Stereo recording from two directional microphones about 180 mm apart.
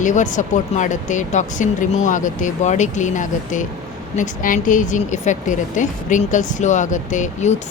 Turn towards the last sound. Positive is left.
turn(degrees=40)  # may be behind; listen again after turning